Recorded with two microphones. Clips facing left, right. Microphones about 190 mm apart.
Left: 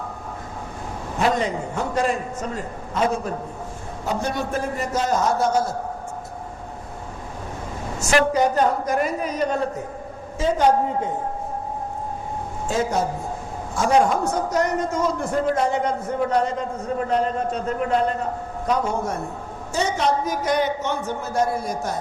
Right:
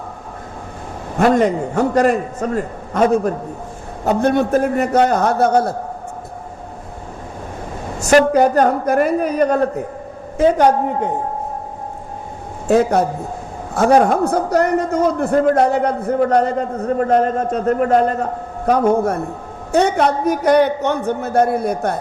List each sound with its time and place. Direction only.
1.2 s a man's voice: 50° right (ahead or behind)
2.0 s a man's voice: 60° right (ahead or behind)
8.0 s a man's voice: 50° right (ahead or behind)
12.6 s a man's voice: 65° right (ahead or behind)